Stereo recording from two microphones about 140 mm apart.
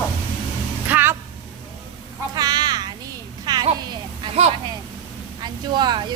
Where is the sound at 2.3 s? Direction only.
30° right (ahead or behind).